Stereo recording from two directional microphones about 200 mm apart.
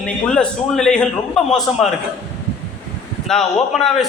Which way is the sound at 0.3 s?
5° left (ahead or behind).